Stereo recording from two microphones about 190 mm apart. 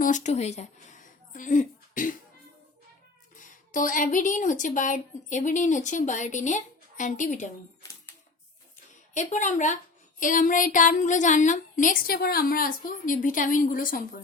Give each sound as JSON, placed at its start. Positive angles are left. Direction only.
{"t": 0.0, "sound": "speech", "side_deg": 40}
{"t": 3.7, "sound": "a woman's voice", "side_deg": 45}
{"t": 9.1, "sound": "a woman's voice", "side_deg": 40}